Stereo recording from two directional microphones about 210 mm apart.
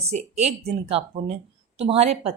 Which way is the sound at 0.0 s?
30° right (ahead or behind).